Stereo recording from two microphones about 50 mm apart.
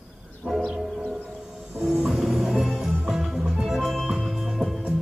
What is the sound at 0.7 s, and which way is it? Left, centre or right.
Howl, centre.